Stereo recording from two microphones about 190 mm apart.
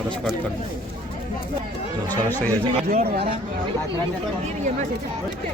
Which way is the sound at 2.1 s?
10° left (ahead or behind).